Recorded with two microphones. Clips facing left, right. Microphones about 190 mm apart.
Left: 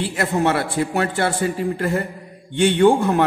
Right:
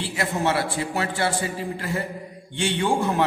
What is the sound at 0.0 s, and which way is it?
A man's voice, 55° left (ahead or behind).